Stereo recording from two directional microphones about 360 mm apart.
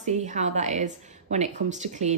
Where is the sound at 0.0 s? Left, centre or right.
Centre.